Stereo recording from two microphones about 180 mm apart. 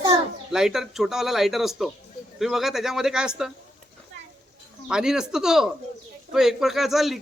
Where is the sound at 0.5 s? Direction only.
Centre (ahead or behind).